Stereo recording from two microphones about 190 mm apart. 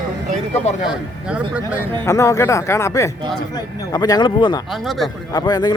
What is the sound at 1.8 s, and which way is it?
Speech, 15° left (ahead or behind).